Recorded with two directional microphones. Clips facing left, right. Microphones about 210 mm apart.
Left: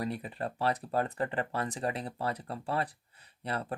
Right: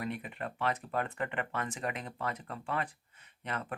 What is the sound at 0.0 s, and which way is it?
Speech, 35° left (ahead or behind).